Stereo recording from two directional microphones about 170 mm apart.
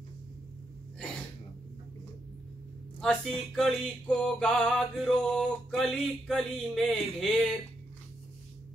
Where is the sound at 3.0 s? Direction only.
Centre (ahead or behind).